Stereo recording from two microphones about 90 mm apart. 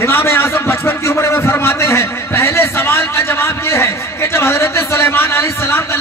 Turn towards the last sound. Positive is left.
turn(degrees=25)  # may be behind; listen again after turning